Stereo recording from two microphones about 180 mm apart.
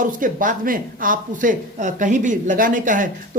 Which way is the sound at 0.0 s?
45° right (ahead or behind).